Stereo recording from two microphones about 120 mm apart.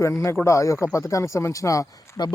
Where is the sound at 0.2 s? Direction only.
25° left (ahead or behind).